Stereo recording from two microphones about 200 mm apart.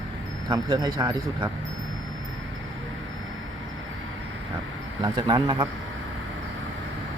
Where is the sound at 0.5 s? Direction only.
20° right (ahead or behind).